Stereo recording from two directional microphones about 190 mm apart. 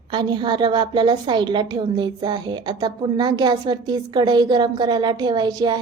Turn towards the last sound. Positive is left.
turn(degrees=-20)  # may be behind; listen again after turning